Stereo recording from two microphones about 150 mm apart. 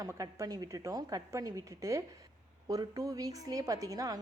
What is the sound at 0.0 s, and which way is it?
A woman's voice, 20° right (ahead or behind).